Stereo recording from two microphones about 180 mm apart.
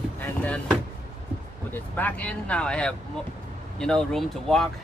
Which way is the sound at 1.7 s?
10° left (ahead or behind).